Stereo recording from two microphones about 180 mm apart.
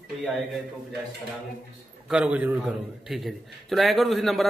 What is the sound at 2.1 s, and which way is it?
A man's voice, 5° right (ahead or behind).